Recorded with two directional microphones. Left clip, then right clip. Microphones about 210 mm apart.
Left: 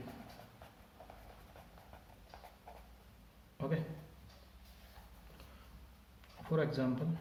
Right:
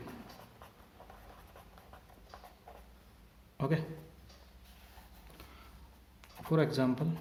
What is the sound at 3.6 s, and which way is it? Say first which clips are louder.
Speech: right 5 dB; 55° right (ahead or behind).